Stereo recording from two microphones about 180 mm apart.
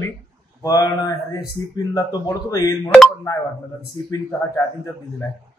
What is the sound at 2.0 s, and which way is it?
Speech, 20° left (ahead or behind).